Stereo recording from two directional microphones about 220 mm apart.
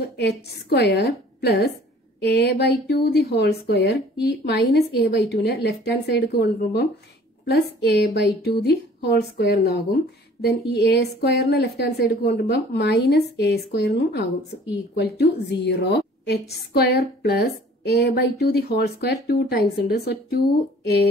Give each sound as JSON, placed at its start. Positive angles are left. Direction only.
{"t": 0.2, "sound": "a woman's voice", "side_deg": 50}